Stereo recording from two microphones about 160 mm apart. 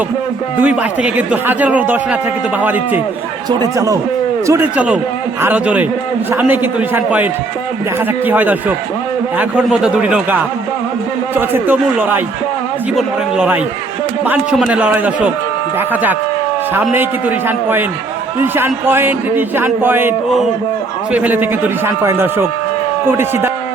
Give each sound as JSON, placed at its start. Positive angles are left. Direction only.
{"t": 0.6, "sound": "a man's voice", "side_deg": -10}